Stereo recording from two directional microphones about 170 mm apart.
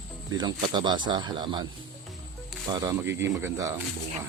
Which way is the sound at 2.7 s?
20° right (ahead or behind).